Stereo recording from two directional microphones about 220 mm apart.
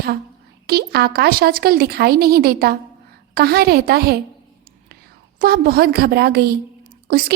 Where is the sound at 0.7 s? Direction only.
45° right (ahead or behind).